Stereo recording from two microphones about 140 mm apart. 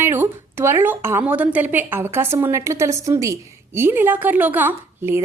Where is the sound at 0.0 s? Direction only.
15° right (ahead or behind).